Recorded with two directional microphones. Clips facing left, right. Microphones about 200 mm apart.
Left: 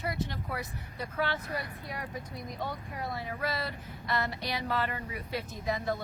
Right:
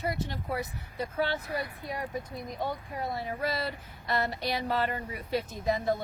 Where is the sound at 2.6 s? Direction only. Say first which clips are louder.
Right 4 dB; 25° right (ahead or behind).